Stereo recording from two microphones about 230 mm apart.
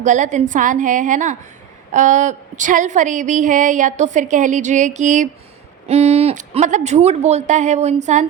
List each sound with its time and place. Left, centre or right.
0.0 s a woman's voice: right